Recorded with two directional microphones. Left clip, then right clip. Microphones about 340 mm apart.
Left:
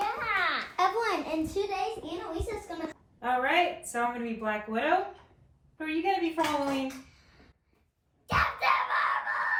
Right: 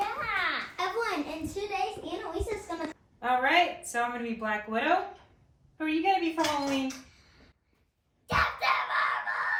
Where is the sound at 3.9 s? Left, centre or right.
Centre.